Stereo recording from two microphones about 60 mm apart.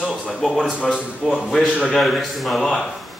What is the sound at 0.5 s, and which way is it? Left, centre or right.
Speech, centre.